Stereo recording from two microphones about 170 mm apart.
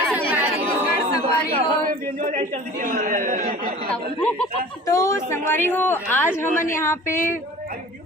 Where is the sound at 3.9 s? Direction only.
5° left (ahead or behind).